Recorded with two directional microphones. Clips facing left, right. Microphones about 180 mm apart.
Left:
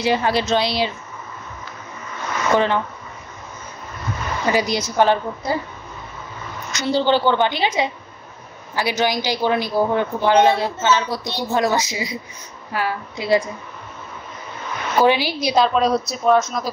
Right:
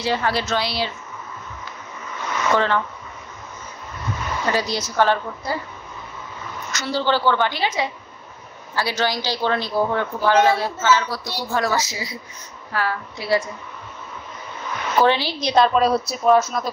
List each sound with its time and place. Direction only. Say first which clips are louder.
0.0 s a man's voice: left 3 dB; 15° left (ahead or behind)
2.5 s a man's voice: left 2 dB; 15° left (ahead or behind)
4.5 s a man's voice: left 4 dB; 15° left (ahead or behind)
6.7 s a woman's voice: left 4 dB; 15° left (ahead or behind)
15.0 s a man's voice: left 2 dB; 10° left (ahead or behind)
15.4 s a woman's voice: right 1 dB; centre (ahead or behind)